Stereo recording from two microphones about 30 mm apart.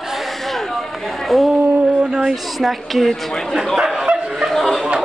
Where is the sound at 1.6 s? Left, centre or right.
Right.